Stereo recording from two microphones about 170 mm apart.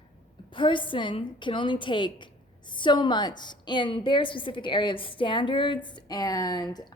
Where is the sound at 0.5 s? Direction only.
30° left (ahead or behind).